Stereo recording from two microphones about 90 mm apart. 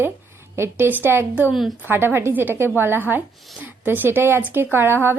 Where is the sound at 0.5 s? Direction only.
30° right (ahead or behind).